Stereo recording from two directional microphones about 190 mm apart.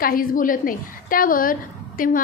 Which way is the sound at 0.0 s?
50° left (ahead or behind).